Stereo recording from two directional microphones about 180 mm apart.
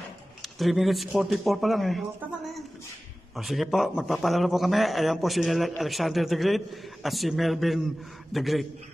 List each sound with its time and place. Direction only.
0.4 s a man's voice: centre (ahead or behind)
3.3 s a man's voice: centre (ahead or behind)